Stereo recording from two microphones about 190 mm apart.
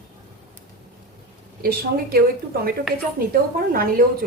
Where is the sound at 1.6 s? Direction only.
50° right (ahead or behind).